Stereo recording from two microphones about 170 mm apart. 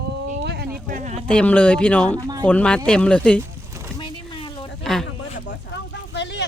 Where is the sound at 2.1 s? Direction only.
25° right (ahead or behind).